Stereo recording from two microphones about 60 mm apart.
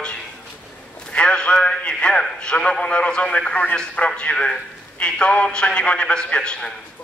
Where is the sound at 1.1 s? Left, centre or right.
Centre.